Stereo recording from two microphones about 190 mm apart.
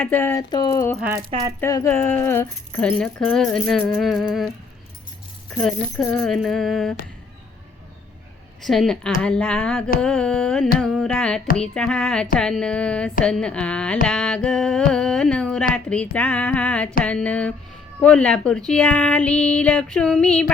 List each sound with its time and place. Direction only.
0.0 s a woman's voice: 10° left (ahead or behind)
1.3 s speech: 30° right (ahead or behind)
1.6 s speech: 15° left (ahead or behind); by 4.5 s centre (ahead or behind)
5.6 s speech: 5° left (ahead or behind)
8.6 s a woman's voice: centre (ahead or behind)